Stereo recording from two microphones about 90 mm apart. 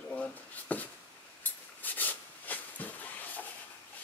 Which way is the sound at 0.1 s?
15° left (ahead or behind).